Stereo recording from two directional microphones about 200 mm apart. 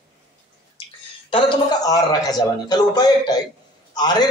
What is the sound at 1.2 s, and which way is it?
A man's voice, 25° left (ahead or behind).